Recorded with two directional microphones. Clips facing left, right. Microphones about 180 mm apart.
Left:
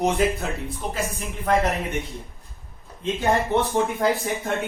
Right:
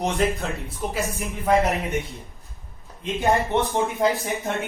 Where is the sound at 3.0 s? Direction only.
15° right (ahead or behind).